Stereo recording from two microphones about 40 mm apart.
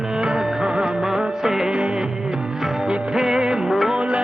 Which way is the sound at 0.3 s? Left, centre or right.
Centre.